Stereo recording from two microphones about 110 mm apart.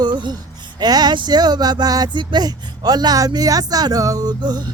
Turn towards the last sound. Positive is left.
turn(degrees=-40)  # may be behind; listen again after turning